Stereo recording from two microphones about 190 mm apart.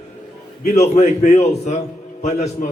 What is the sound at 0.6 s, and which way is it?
A man's voice, 35° left (ahead or behind).